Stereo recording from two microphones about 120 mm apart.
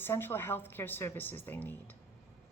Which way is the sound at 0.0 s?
20° left (ahead or behind).